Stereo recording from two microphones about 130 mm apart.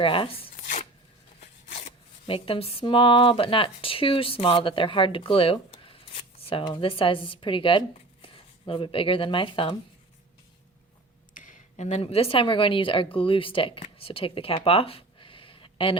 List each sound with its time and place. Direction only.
0.0 s speech: 45° left (ahead or behind)
2.2 s speech: 45° left (ahead or behind)
11.3 s speech: 75° left (ahead or behind); by 16.0 s 45° left (ahead or behind)